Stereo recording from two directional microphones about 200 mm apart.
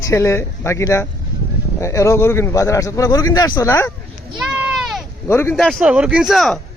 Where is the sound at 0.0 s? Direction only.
15° left (ahead or behind).